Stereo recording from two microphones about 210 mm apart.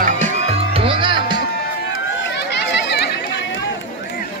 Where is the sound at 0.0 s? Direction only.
35° right (ahead or behind).